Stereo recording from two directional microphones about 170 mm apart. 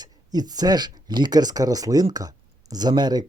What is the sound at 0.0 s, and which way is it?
Speech, 25° right (ahead or behind).